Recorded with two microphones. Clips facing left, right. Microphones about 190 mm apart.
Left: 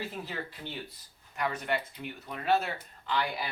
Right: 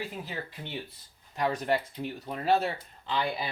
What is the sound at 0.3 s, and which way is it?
Speech, 15° right (ahead or behind).